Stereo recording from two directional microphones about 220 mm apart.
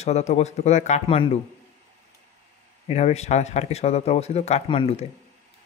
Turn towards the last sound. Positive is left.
turn(degrees=25)  # may be behind; listen again after turning